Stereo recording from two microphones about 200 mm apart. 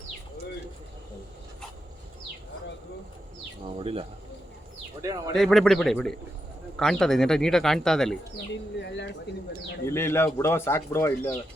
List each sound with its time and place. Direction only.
3.8 s speech: 30° right (ahead or behind)
5.0 s speech: 15° right (ahead or behind)
5.3 s speech: centre (ahead or behind)
9.8 s speech: 15° left (ahead or behind)